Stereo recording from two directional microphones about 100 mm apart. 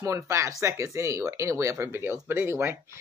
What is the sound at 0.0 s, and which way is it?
Speech, 30° right (ahead or behind).